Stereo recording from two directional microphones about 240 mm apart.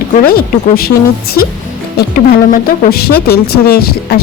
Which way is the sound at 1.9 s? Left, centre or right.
Left.